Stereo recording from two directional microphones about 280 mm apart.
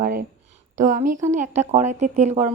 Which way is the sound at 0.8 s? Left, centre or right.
Right.